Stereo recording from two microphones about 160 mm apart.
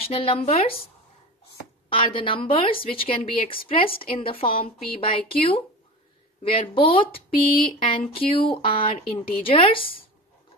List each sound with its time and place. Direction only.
0.0 s speech: 35° left (ahead or behind)
1.9 s speech: 35° left (ahead or behind)